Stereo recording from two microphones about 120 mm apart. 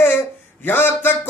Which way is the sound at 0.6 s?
15° left (ahead or behind).